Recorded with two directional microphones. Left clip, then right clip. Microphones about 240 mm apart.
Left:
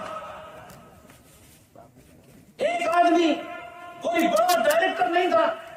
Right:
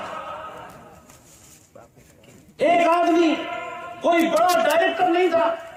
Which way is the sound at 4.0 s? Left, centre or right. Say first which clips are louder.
Right 3 dB; centre.